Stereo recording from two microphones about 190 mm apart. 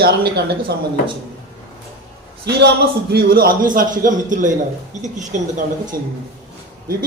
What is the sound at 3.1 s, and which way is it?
A man's voice, 50° right (ahead or behind).